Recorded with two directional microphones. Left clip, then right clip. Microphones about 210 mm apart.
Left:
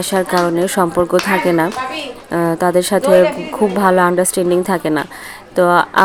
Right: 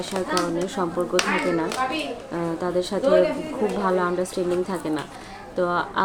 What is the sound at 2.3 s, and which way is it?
Speech, 50° left (ahead or behind).